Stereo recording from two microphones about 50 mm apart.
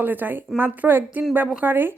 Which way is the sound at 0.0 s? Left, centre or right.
Right.